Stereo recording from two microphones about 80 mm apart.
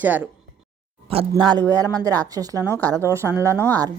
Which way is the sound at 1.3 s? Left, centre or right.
Right.